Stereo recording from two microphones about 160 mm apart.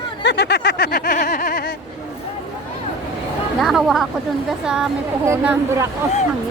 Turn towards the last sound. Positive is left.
turn(degrees=-15)  # may be behind; listen again after turning